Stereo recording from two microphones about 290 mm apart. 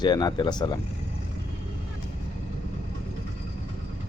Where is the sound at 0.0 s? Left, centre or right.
Centre.